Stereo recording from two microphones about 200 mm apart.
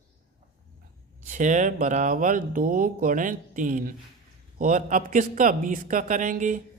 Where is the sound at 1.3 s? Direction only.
40° right (ahead or behind).